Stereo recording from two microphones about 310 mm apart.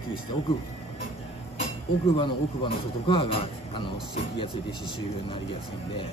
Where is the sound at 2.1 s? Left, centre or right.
Centre.